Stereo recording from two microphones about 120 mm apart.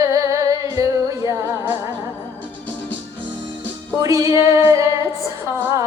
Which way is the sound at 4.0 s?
30° right (ahead or behind).